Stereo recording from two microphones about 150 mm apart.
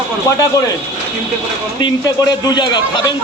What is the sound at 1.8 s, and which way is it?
Speech, 25° left (ahead or behind).